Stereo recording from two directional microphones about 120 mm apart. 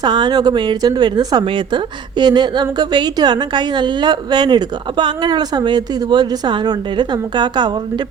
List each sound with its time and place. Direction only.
0.0 s speech: 35° right (ahead or behind)